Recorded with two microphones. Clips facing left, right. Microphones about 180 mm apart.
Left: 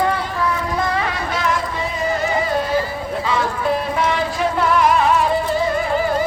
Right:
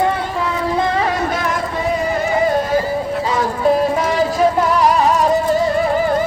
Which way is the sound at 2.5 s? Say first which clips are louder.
Right 3 dB; 45° right (ahead or behind).